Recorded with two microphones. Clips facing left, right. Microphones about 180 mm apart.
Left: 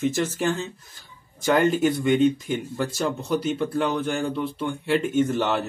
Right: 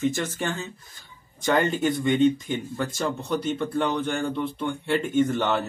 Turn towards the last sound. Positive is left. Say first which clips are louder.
# even
turn(degrees=5)  # may be behind; listen again after turning